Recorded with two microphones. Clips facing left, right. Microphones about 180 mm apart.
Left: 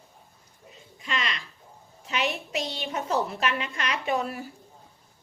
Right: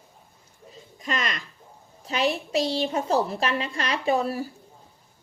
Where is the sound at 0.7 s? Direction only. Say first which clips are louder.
Right 3 dB; 40° right (ahead or behind).